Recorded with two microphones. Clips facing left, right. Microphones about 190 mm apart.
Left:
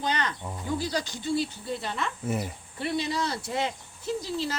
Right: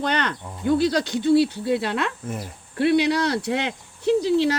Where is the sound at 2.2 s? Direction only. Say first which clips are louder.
Left 2 dB; 5° left (ahead or behind).